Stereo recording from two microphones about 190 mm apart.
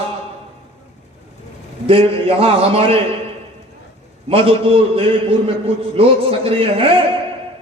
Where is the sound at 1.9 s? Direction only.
30° right (ahead or behind).